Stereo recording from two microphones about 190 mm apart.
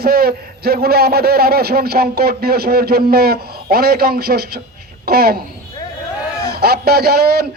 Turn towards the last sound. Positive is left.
turn(degrees=-55)  # may be behind; listen again after turning